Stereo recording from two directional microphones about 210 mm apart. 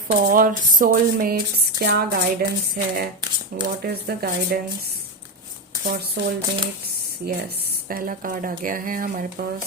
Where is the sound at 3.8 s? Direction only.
45° right (ahead or behind).